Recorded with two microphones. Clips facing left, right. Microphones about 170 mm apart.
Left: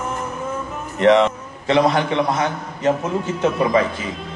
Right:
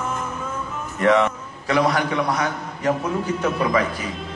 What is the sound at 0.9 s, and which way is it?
A man's voice, 20° left (ahead or behind).